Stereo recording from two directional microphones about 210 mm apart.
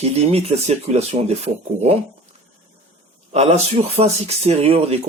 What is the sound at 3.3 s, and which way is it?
Speech, 30° right (ahead or behind).